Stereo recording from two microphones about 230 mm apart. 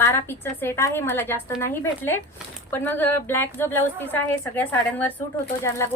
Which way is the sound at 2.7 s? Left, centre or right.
Centre.